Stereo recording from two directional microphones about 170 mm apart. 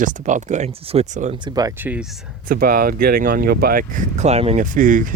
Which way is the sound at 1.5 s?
20° right (ahead or behind).